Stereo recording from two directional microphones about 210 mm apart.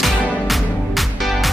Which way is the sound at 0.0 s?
Centre (ahead or behind).